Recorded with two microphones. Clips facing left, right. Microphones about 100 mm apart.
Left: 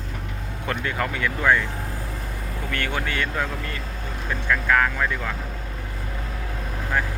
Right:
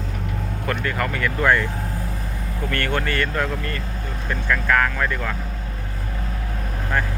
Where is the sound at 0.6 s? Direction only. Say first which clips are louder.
Right 1 dB; 15° left (ahead or behind).